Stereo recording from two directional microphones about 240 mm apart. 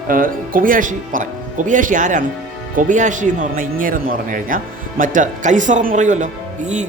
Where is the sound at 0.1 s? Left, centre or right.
Right.